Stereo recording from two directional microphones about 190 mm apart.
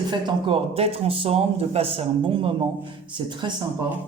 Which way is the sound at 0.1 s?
25° right (ahead or behind).